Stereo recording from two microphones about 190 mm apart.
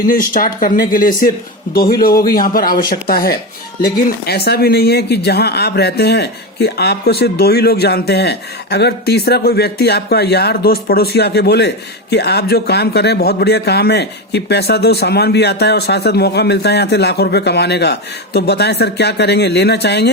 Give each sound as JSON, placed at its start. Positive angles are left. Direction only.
{"t": 0.0, "sound": "a man's voice", "side_deg": 45}